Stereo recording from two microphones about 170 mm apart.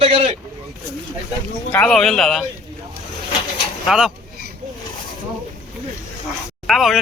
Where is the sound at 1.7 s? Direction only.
5° left (ahead or behind).